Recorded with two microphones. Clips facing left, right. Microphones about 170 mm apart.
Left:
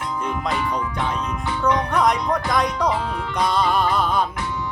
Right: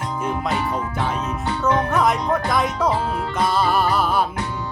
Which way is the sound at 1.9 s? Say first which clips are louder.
Right 1 dB; 5° right (ahead or behind).